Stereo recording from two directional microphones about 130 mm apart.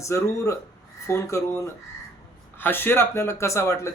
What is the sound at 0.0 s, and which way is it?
Speech, 25° left (ahead or behind).